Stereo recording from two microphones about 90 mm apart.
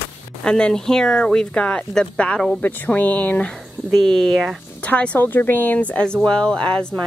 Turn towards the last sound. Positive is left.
turn(degrees=10)  # may be behind; listen again after turning